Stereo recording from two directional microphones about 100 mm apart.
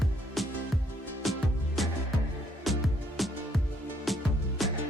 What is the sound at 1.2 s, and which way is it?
Music, centre (ahead or behind).